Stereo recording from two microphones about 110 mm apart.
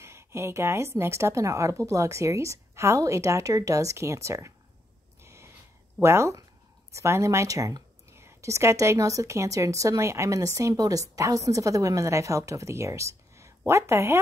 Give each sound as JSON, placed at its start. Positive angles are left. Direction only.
{"t": 0.0, "sound": "speech", "side_deg": -25}
{"t": 5.2, "sound": "snort", "side_deg": -25}
{"t": 5.9, "sound": "speech", "side_deg": -25}